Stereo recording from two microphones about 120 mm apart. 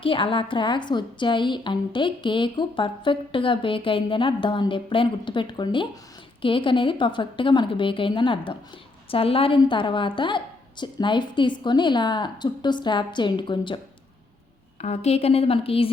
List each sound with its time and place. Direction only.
0.0 s a woman's voice: 45° left (ahead or behind)
14.8 s a woman's voice: 65° left (ahead or behind)